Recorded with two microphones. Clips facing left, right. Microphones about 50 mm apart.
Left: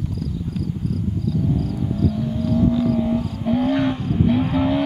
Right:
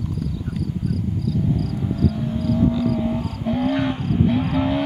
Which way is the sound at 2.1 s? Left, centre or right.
Centre.